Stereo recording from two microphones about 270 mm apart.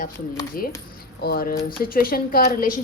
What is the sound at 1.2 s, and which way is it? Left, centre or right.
A woman's voice, left.